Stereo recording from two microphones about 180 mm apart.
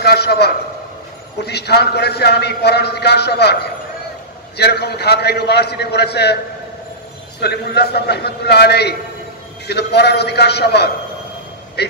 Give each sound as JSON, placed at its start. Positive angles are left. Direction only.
{"t": 0.0, "sound": "a man's voice", "side_deg": 65}
{"t": 7.3, "sound": "a man's voice", "side_deg": 65}